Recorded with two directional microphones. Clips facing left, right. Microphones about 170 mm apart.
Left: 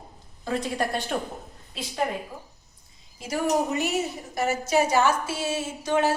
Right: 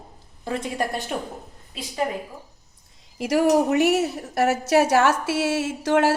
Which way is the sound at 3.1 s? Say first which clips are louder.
Right 6 dB; 80° right.